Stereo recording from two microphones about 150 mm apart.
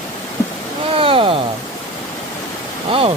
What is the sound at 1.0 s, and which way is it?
Speech, 35° right (ahead or behind).